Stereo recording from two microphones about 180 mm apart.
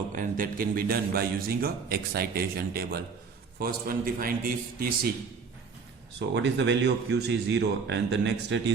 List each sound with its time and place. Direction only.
0.1 s a man's voice: 50° right (ahead or behind)
6.1 s speech: 75° right (ahead or behind)